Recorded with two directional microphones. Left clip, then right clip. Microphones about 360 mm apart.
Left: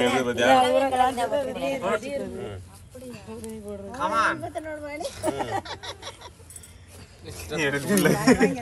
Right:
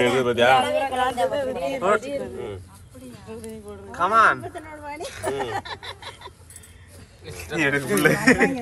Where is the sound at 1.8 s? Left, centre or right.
Centre.